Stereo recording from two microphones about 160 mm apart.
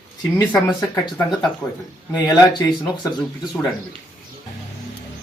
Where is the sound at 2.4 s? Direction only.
20° left (ahead or behind).